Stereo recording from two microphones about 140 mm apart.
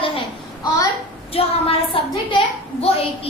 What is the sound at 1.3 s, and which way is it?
A woman's voice, 45° left (ahead or behind).